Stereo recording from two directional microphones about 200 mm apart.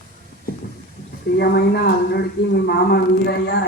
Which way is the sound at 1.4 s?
55° left (ahead or behind).